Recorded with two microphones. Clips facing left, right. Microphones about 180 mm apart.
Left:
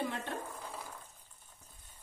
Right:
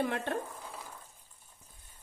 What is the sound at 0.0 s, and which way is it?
Speech, 60° right (ahead or behind).